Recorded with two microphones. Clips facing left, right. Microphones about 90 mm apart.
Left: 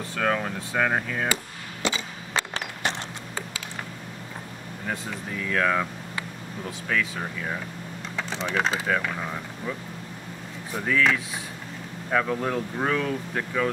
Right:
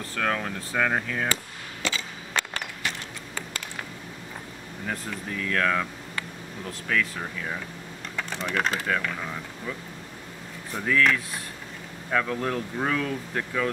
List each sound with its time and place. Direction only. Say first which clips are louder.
0.1 s speech: left 2 dB; 5° left (ahead or behind)
1.8 s a sound: left 3 dB; 20° left (ahead or behind)
2.5 s music: left 3 dB; 25° left (ahead or behind)
4.8 s speech: left 1 dB; 5° left (ahead or behind)